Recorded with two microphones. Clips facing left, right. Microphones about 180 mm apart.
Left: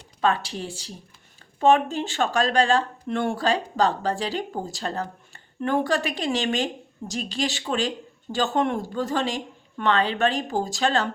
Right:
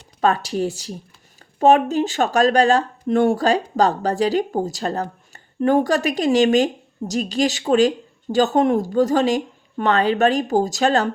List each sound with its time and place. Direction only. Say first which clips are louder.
0.2 s speech: right 5 dB; 40° right (ahead or behind)